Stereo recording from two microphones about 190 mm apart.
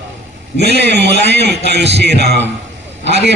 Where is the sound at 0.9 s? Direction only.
65° right (ahead or behind).